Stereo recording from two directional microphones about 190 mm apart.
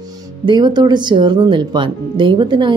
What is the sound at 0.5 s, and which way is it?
Speech, 25° right (ahead or behind).